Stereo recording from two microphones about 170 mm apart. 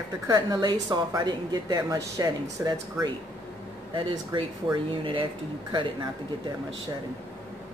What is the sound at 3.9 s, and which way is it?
A woman's voice, 30° right (ahead or behind).